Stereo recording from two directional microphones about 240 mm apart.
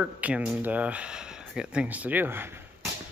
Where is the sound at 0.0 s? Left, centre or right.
Centre.